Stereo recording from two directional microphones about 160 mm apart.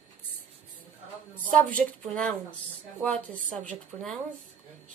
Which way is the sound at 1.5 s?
10° left (ahead or behind).